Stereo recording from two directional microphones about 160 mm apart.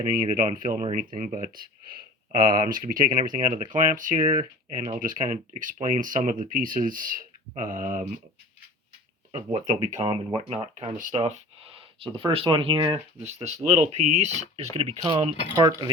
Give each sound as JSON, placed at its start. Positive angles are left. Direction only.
{"t": 0.3, "sound": "speech", "side_deg": -55}
{"t": 9.3, "sound": "speech", "side_deg": -45}
{"t": 13.2, "sound": "speech", "side_deg": -45}